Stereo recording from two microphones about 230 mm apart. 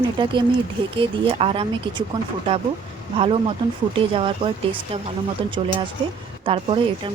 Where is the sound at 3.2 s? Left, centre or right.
Right.